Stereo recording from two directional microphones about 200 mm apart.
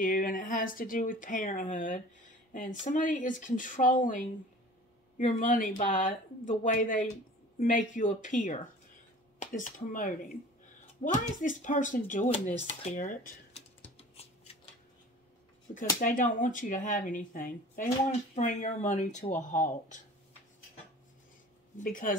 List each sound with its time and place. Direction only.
0.0 s speech: 45° left (ahead or behind)
16.0 s speech: 40° left (ahead or behind)
21.7 s speech: 45° left (ahead or behind)